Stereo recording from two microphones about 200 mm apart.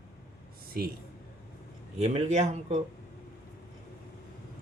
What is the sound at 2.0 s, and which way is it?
Speech, 30° right (ahead or behind).